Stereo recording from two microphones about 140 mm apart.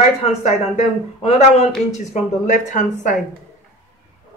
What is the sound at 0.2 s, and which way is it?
Speech, 50° left (ahead or behind).